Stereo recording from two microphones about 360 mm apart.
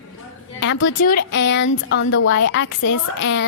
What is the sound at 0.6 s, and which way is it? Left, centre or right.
A woman's voice, left.